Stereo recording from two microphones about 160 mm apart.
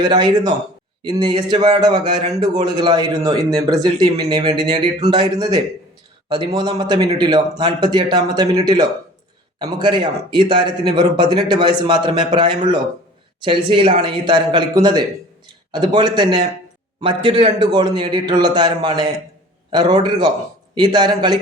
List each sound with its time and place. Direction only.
0.0 s speech: 25° right (ahead or behind)